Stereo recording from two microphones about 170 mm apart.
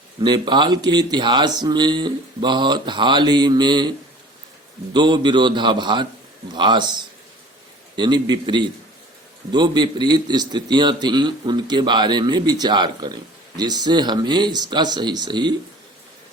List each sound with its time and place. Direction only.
0.2 s speech: 25° right (ahead or behind)
4.9 s speech: 25° right (ahead or behind)